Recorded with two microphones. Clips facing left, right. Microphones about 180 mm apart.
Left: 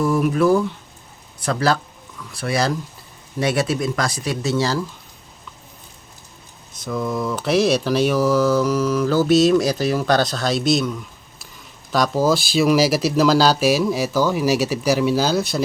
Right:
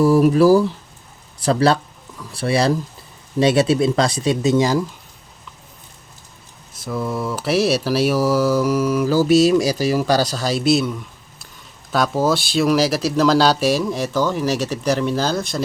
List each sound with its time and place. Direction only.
0.0 s speech: 30° right (ahead or behind); by 4.9 s 15° right (ahead or behind)
6.7 s mantra: 5° right (ahead or behind)
11.9 s speech: centre (ahead or behind)